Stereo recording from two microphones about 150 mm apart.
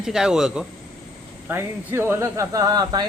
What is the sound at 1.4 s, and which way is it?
Speech, 15° right (ahead or behind).